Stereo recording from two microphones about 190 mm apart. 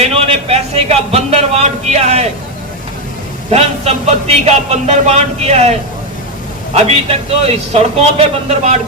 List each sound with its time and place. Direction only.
0.0 s a man's voice: 30° right (ahead or behind)
3.5 s a man's voice: 35° right (ahead or behind)
6.8 s a man's voice: 35° right (ahead or behind)